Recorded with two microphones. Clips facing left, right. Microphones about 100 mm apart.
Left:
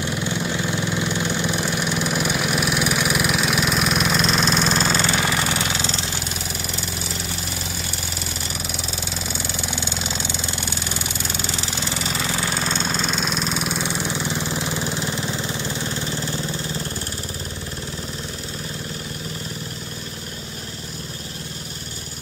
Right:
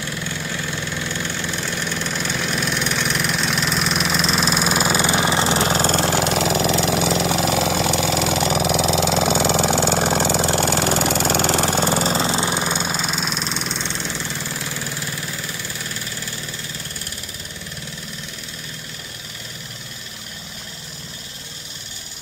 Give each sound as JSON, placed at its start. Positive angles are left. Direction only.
{"t": 0.0, "sound": "engine", "side_deg": 20}
{"t": 12.3, "sound": "engine", "side_deg": -20}